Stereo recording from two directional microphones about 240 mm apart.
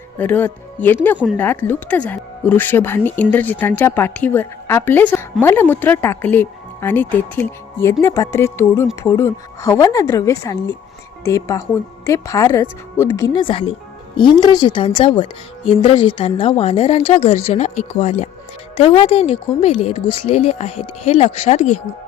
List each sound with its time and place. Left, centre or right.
0.2 s speech: centre; by 21.8 s left